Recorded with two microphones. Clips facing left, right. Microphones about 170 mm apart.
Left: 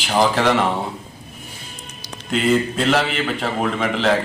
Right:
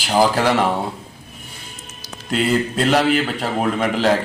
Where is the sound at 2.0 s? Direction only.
5° right (ahead or behind).